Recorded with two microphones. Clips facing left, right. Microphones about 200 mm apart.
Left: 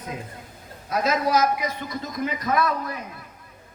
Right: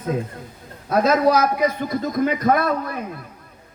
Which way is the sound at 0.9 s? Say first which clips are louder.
Right 7 dB; 55° right (ahead or behind).